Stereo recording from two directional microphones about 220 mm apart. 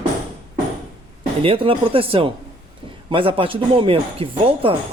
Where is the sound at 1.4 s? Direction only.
25° right (ahead or behind).